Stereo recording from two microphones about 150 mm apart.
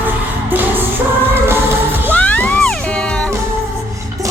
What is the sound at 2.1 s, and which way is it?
Music, 10° left (ahead or behind).